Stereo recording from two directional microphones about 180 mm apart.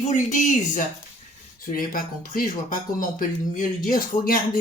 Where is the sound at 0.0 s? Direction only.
45° left (ahead or behind).